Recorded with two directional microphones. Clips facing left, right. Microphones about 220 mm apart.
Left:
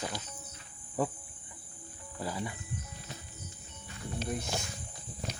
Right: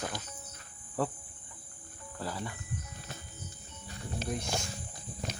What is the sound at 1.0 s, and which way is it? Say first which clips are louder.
Speech: left 1 dB; 10° left (ahead or behind).